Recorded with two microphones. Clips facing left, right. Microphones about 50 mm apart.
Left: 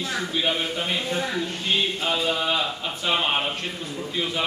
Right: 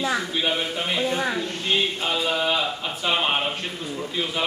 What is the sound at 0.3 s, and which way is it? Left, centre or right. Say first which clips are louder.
Speech: even; centre.